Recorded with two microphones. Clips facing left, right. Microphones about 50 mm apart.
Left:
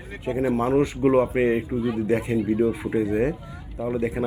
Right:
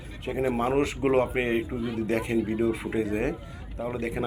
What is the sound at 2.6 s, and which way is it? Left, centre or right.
Speech, right.